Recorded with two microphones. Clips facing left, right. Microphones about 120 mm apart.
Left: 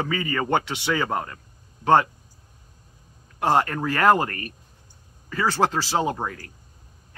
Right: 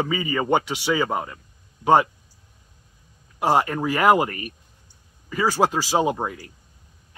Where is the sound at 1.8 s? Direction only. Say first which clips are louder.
Right 1 dB; 40° left (ahead or behind).